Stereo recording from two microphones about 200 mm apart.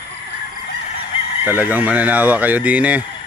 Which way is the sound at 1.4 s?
10° right (ahead or behind).